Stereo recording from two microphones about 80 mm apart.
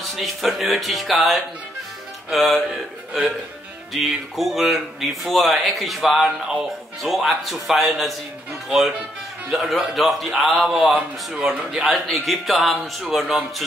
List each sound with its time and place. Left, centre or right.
0.1 s speech: centre
3.9 s speech: centre
10.9 s speech: centre
11.9 s speech: centre